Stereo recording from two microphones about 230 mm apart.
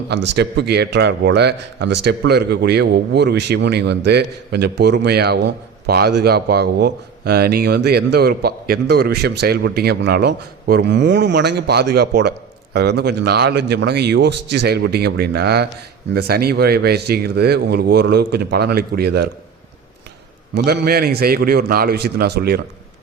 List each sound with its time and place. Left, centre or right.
0.1 s a man's voice: right
20.7 s a man's voice: right